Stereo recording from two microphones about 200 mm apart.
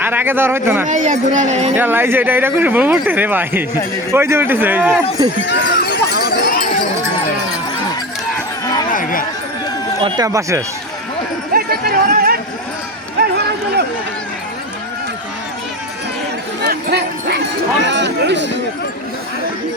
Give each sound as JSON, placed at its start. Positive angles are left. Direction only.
{"t": 0.0, "sound": "speech", "side_deg": -10}
{"t": 0.9, "sound": "speech", "side_deg": -35}
{"t": 1.7, "sound": "speech", "side_deg": -10}
{"t": 5.5, "sound": "run", "side_deg": 55}
{"t": 8.9, "sound": "chatter", "side_deg": 45}
{"t": 10.0, "sound": "speech", "side_deg": -20}
{"t": 11.5, "sound": "chatter", "side_deg": -50}
{"t": 16.6, "sound": "bow-wow", "side_deg": -55}
{"t": 17.8, "sound": "speech", "side_deg": -60}